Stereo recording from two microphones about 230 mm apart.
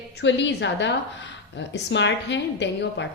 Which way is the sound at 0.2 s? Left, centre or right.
Left.